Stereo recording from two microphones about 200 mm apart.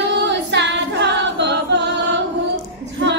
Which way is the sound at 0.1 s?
60° right (ahead or behind).